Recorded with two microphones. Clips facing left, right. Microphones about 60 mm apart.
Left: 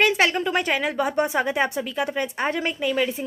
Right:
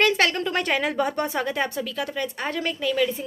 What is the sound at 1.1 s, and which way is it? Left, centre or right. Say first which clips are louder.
A woman's voice: left 3 dB; centre.